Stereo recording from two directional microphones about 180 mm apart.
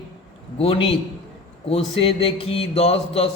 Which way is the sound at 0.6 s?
30° left (ahead or behind).